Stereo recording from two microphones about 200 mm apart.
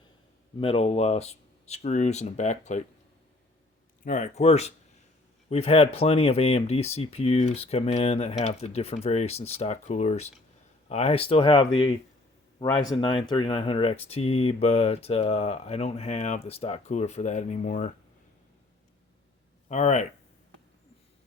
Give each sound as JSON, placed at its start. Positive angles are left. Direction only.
{"t": 0.6, "sound": "speech", "side_deg": 30}
{"t": 4.0, "sound": "speech", "side_deg": 40}
{"t": 12.7, "sound": "speech", "side_deg": 20}
{"t": 19.6, "sound": "speech", "side_deg": 35}